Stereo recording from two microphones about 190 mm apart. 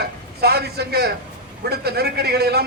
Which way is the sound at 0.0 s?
55° right (ahead or behind).